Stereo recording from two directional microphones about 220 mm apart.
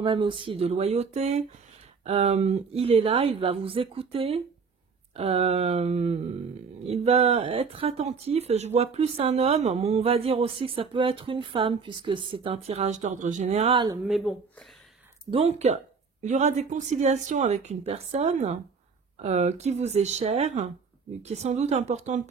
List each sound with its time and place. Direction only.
0.0 s speech: 20° right (ahead or behind)
14.0 s speech: centre (ahead or behind)
15.3 s speech: 30° right (ahead or behind)